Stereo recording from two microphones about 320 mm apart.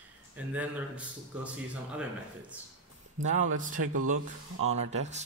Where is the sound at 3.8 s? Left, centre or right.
Right.